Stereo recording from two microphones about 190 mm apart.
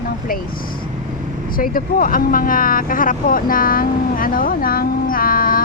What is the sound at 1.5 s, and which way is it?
Speech, 45° left (ahead or behind).